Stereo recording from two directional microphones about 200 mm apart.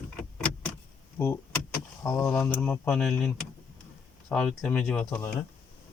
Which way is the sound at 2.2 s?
Centre (ahead or behind).